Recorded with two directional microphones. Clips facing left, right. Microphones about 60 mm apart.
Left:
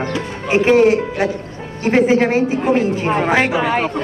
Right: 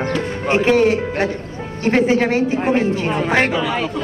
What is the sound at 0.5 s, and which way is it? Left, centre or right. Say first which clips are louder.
Speech: left 3 dB; centre.